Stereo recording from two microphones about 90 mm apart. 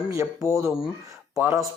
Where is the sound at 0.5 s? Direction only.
5° right (ahead or behind).